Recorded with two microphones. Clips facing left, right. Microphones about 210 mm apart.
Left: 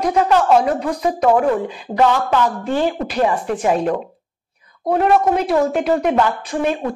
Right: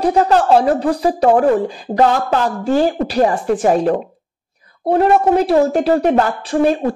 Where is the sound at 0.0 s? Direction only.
35° right (ahead or behind).